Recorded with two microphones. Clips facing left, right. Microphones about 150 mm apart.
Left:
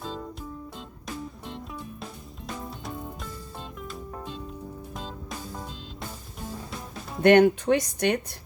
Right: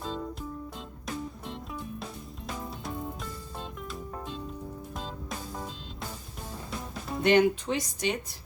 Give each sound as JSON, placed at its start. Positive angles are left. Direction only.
{"t": 0.0, "sound": "music", "side_deg": 0}
{"t": 7.2, "sound": "speech", "side_deg": 60}